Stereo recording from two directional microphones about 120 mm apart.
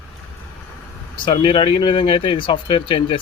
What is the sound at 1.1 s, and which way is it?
Speech, 45° left (ahead or behind).